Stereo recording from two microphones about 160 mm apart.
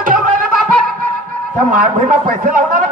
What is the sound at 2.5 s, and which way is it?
Speech, 55° right (ahead or behind).